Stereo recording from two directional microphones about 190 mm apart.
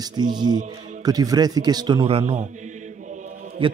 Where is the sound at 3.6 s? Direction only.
30° right (ahead or behind).